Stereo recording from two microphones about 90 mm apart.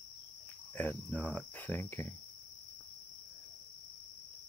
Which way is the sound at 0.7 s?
20° left (ahead or behind).